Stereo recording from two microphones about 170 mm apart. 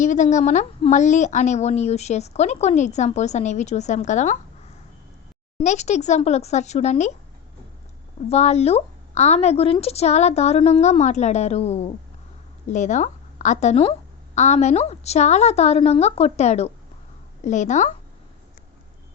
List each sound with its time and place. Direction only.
0.0 s a woman's voice: 45° left (ahead or behind)
5.5 s a woman's voice: 40° left (ahead or behind)
8.3 s a woman's voice: 40° left (ahead or behind)